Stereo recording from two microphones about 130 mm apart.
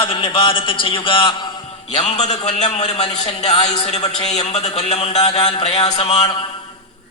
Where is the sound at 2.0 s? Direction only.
60° left (ahead or behind).